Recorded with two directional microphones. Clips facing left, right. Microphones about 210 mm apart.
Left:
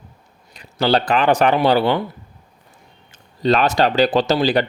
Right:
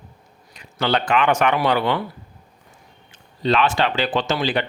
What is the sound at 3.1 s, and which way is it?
Speech, 40° left (ahead or behind).